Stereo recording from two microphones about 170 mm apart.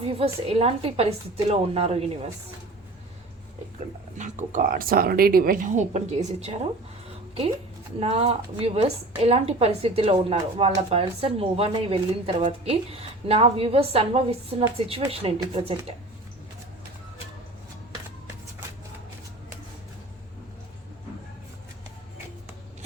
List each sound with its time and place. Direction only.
0.0 s a woman's voice: 35° right (ahead or behind)
4.2 s speech: 45° right (ahead or behind)
7.9 s a woman's voice: 35° right (ahead or behind)